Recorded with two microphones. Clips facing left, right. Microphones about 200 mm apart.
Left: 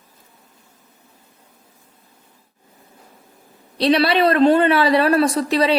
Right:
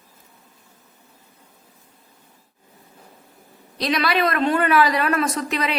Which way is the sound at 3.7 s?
30° left (ahead or behind).